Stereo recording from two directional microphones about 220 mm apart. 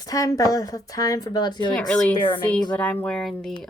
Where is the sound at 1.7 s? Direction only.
5° left (ahead or behind).